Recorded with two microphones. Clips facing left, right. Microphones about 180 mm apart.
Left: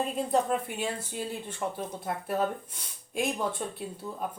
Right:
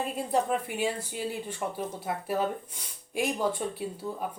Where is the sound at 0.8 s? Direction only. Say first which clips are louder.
Right 2 dB; 10° right (ahead or behind).